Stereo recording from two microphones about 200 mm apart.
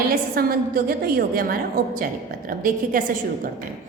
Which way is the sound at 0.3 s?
50° right (ahead or behind).